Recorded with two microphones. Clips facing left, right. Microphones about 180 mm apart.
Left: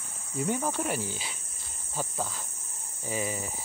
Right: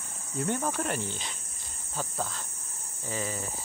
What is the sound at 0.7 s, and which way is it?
Speech, 5° left (ahead or behind).